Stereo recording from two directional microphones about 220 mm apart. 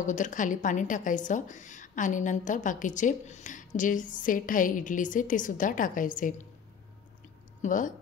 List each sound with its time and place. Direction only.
0.0 s a woman's voice: 35° left (ahead or behind)
7.6 s a woman's voice: 35° left (ahead or behind)